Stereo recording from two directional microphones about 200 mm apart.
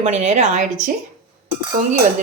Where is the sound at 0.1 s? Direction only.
35° right (ahead or behind).